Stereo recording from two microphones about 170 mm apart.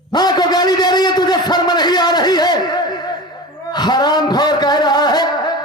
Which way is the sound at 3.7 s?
25° left (ahead or behind).